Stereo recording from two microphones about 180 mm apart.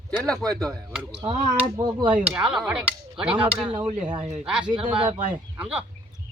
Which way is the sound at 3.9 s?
30° right (ahead or behind).